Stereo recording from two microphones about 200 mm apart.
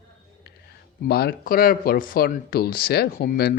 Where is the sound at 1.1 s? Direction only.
50° left (ahead or behind).